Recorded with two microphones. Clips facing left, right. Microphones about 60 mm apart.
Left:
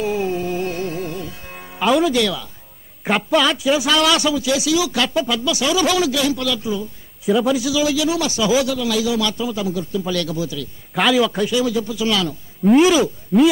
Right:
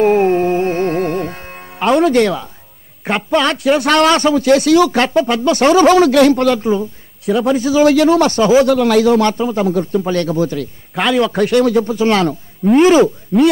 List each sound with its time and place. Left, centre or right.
0.0 s music: right
2.0 s speech: right
3.0 s a man's voice: centre
3.4 s speech: right
11.0 s a man's voice: centre
11.3 s speech: right
13.3 s a man's voice: centre